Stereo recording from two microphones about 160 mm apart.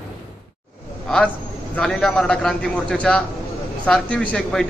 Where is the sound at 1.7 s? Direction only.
5° left (ahead or behind).